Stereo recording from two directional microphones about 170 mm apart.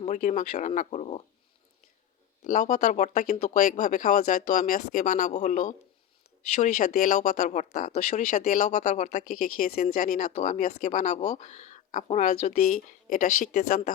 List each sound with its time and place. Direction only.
0.0 s speech: 45° left (ahead or behind)
2.4 s speech: 50° left (ahead or behind)